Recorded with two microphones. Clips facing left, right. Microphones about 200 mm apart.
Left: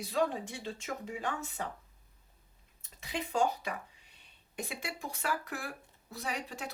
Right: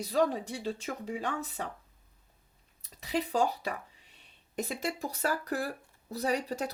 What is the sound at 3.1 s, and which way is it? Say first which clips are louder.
Speech: right 2 dB; 35° right (ahead or behind).